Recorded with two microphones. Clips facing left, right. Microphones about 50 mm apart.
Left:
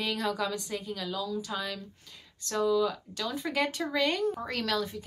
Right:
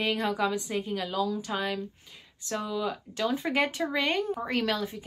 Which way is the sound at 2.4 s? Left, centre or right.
Centre.